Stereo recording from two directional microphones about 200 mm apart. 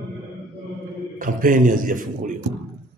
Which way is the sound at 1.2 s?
40° right (ahead or behind).